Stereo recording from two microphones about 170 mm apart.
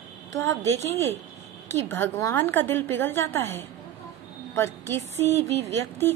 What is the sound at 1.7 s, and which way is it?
A woman's voice, 15° left (ahead or behind).